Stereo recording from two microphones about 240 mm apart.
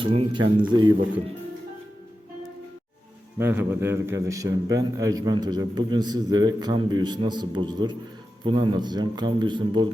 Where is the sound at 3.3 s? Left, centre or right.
Centre.